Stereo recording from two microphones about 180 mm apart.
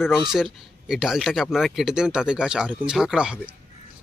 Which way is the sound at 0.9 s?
Centre (ahead or behind).